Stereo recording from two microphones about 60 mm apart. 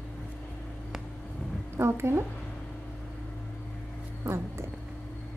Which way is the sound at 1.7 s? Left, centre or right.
Right.